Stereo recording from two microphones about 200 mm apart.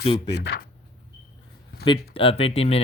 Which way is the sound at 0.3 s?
55° left (ahead or behind).